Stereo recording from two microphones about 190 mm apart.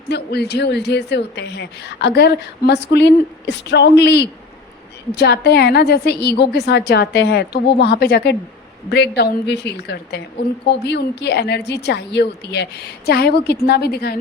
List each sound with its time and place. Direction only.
0.1 s a woman's voice: 60° left (ahead or behind)